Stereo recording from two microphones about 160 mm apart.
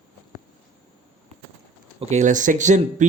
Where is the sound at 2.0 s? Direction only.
50° right (ahead or behind).